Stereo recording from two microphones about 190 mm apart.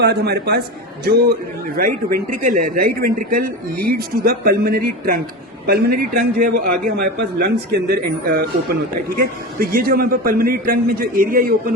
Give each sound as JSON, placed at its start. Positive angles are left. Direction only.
{"t": 0.0, "sound": "a man's voice", "side_deg": -60}
{"t": 1.7, "sound": "a man's voice", "side_deg": -45}